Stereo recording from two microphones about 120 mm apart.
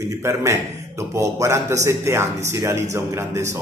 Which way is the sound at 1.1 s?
25° right (ahead or behind).